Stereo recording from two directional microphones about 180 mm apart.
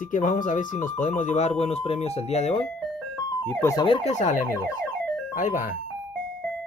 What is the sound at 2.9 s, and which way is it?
Ice cream truck, 10° left (ahead or behind).